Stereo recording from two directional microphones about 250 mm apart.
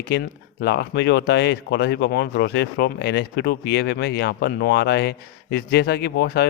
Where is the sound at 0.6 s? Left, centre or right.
Left.